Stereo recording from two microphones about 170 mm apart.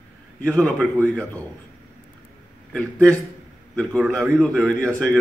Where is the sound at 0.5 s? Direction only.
Centre (ahead or behind).